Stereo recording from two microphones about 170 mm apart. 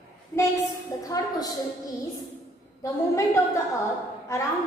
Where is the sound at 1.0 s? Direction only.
20° left (ahead or behind).